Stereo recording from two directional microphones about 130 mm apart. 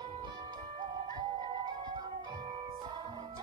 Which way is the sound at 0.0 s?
35° right (ahead or behind).